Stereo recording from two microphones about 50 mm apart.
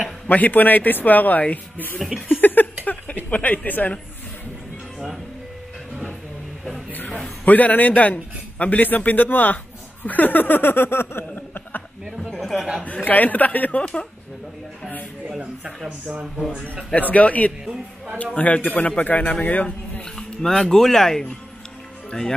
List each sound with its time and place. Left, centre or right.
0.3 s a man's voice: left
2.4 s a sound: left
7.4 s a man's voice: left
12.2 s a sound: centre
12.5 s a man's voice: centre
12.8 s a man's voice: left
17.1 s a man's voice: left
20.2 s speech: centre